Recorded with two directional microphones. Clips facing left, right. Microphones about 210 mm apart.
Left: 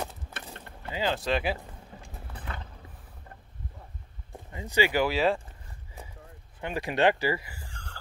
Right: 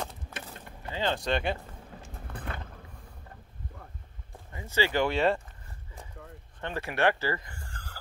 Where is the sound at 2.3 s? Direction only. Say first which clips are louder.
Right 5 dB; 55° right (ahead or behind).